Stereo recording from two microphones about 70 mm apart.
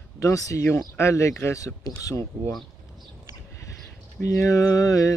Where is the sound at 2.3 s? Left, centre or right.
Centre.